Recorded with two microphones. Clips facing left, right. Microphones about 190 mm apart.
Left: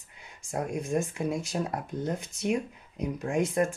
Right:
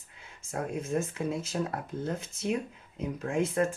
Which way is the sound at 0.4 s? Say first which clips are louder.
Left 2 dB; 15° left (ahead or behind).